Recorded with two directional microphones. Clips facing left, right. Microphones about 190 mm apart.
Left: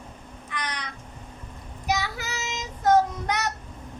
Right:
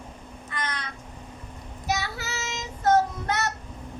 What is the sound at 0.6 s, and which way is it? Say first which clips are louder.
Crow: right 2 dB; 15° left (ahead or behind).